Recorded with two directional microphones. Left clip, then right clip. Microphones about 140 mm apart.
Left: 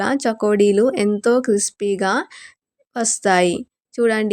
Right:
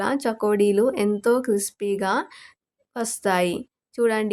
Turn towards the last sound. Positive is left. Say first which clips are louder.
# left 4 dB
turn(degrees=30)  # may be behind; listen again after turning